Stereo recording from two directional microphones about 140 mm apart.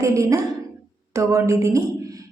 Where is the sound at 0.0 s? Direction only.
20° right (ahead or behind).